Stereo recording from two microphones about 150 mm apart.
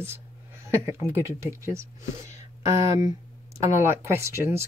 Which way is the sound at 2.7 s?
40° left (ahead or behind).